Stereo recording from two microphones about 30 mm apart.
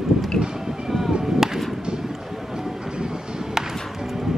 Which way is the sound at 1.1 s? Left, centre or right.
Right.